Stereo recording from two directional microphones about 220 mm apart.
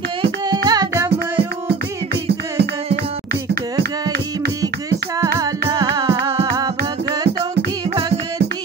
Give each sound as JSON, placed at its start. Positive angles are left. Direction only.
{"t": 0.2, "sound": "music", "side_deg": -20}
{"t": 5.2, "sound": "music", "side_deg": -15}